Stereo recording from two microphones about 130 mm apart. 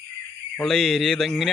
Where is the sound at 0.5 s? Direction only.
Centre (ahead or behind).